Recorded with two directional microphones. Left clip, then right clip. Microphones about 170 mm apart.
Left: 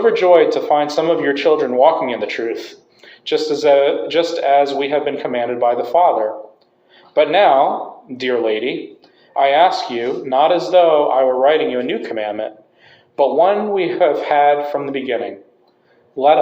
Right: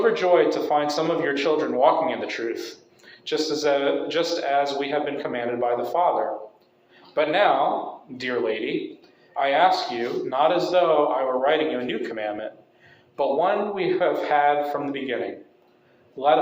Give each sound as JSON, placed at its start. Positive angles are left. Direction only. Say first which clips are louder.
{"t": 0.0, "sound": "a man's voice", "louder": "left 7 dB", "side_deg": 40}